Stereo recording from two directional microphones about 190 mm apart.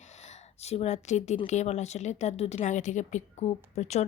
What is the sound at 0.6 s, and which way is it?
A woman's voice, 35° left (ahead or behind).